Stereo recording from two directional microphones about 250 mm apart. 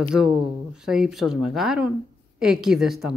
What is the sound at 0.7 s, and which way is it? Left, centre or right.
Speech, centre.